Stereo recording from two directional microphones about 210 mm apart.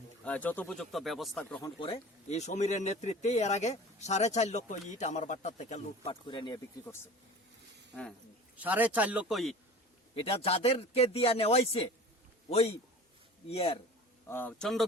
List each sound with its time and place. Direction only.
0.3 s speech: 5° left (ahead or behind)
1.8 s speech: 30° left (ahead or behind)
6.2 s speech: 20° left (ahead or behind)
8.5 s speech: 10° right (ahead or behind)
10.2 s speech: 30° left (ahead or behind)
14.3 s speech: 10° left (ahead or behind)